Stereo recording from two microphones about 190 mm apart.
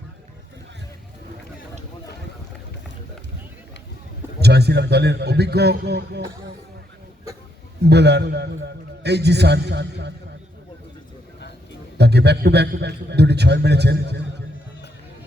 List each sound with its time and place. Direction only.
4.4 s a man's voice: 60° right (ahead or behind)
7.9 s a man's voice: 60° right (ahead or behind)
11.3 s a sound: 65° left (ahead or behind)
11.9 s a man's voice: 60° right (ahead or behind)